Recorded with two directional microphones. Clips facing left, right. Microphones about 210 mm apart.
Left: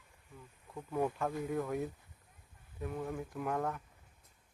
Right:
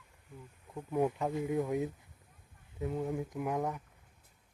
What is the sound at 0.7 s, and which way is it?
Speech, 15° right (ahead or behind).